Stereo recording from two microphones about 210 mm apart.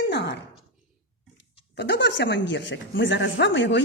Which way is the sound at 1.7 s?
55° left (ahead or behind).